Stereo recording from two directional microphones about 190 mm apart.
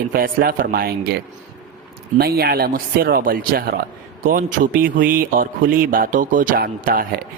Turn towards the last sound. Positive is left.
turn(degrees=-50)  # may be behind; listen again after turning